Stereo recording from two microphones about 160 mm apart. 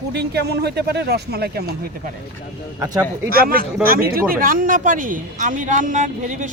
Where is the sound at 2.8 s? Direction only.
25° right (ahead or behind).